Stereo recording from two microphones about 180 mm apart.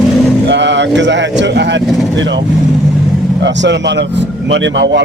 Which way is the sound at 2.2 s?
90° right.